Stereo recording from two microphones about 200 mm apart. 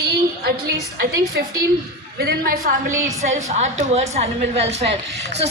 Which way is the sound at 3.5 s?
35° right (ahead or behind).